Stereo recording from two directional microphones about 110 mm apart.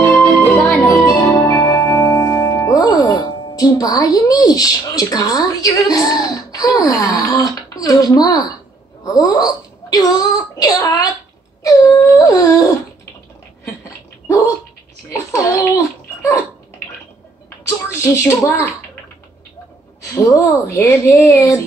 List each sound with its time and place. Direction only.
0.8 s music: 30° left (ahead or behind)
9.0 s speech: 35° left (ahead or behind)
11.6 s a sound: 30° left (ahead or behind)
13.7 s dog: 30° left (ahead or behind)
17.6 s speech: 25° left (ahead or behind)
20.2 s speech: 30° left (ahead or behind)